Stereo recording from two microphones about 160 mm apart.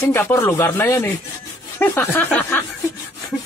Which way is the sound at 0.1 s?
20° left (ahead or behind).